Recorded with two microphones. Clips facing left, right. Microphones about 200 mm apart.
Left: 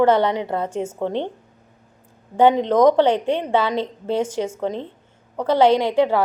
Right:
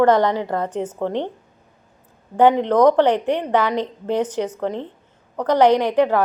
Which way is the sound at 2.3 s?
15° left (ahead or behind).